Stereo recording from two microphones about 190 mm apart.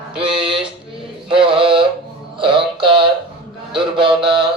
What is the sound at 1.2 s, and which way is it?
Music, 30° right (ahead or behind).